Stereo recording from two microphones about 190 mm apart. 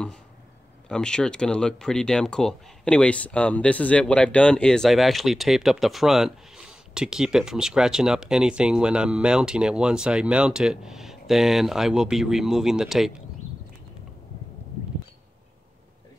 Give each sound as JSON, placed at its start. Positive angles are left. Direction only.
{"t": 0.8, "sound": "speech", "side_deg": 5}